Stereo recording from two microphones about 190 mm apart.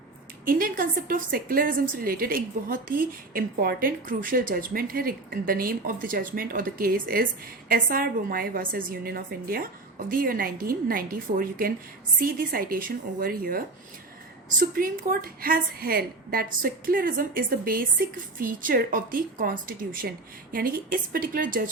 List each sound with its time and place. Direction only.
0.4 s a woman's voice: 45° right (ahead or behind)